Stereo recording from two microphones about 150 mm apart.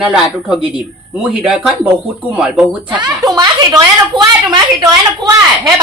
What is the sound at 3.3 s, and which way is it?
A woman's voice, 25° right (ahead or behind).